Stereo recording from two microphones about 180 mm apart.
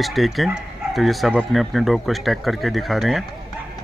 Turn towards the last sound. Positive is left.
turn(degrees=0)  # may be behind; listen again after turning